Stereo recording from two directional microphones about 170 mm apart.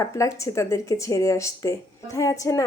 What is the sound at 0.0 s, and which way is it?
A woman's voice, 20° left (ahead or behind).